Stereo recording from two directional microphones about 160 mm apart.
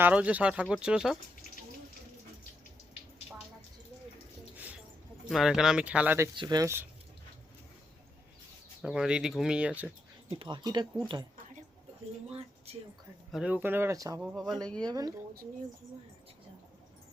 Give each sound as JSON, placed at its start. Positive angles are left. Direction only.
{"t": 0.0, "sound": "speech", "side_deg": -10}
{"t": 4.5, "sound": "a sound", "side_deg": -10}
{"t": 5.3, "sound": "speech", "side_deg": -5}
{"t": 6.3, "sound": "speech", "side_deg": -30}
{"t": 8.8, "sound": "speech", "side_deg": -5}
{"t": 10.3, "sound": "speech", "side_deg": -30}
{"t": 13.3, "sound": "speech", "side_deg": -5}
{"t": 14.2, "sound": "speech", "side_deg": -5}
{"t": 14.5, "sound": "speech", "side_deg": 5}
{"t": 14.8, "sound": "speech", "side_deg": -25}